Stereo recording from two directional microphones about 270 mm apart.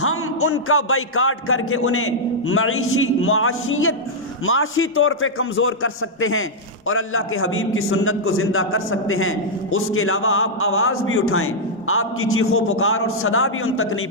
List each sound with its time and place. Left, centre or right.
0.0 s a man's voice: left